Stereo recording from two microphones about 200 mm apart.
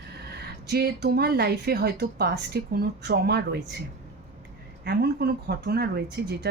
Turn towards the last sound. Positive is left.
turn(degrees=-55)  # may be behind; listen again after turning